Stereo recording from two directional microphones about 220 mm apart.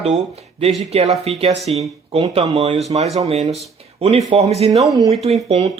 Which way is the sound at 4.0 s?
25° right (ahead or behind).